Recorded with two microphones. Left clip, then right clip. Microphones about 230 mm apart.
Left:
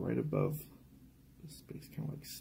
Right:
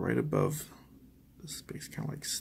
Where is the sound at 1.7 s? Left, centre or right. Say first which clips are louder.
Right 2 dB; centre.